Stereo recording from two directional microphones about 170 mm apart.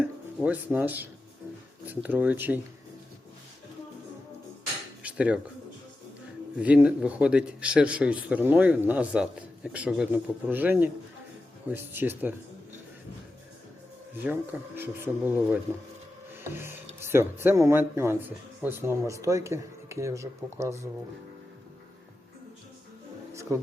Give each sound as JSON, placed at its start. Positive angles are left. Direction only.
{"t": 0.4, "sound": "speech", "side_deg": -10}
{"t": 5.0, "sound": "dishes", "side_deg": -5}
{"t": 6.6, "sound": "speech", "side_deg": -5}
{"t": 14.3, "sound": "speech", "side_deg": -10}
{"t": 16.4, "sound": "music", "side_deg": -15}
{"t": 17.0, "sound": "speech", "side_deg": -15}
{"t": 23.3, "sound": "a sound", "side_deg": -15}